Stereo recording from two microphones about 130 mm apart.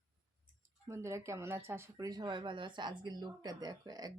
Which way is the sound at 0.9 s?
20° right (ahead or behind).